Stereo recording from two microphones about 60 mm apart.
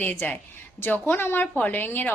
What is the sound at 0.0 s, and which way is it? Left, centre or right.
A woman's voice, left.